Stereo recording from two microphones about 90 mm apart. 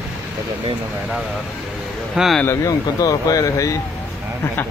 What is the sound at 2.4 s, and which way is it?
Speech, 35° left (ahead or behind).